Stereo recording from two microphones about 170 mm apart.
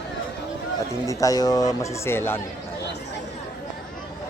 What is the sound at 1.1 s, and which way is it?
Speech, 20° left (ahead or behind).